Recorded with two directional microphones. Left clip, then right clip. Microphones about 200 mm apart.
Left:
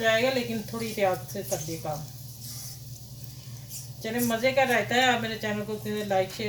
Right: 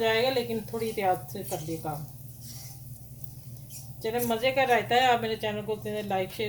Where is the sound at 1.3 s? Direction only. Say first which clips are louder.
Left 3 dB; 50° right (ahead or behind).